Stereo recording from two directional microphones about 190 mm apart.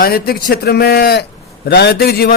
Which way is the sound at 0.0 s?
55° left (ahead or behind).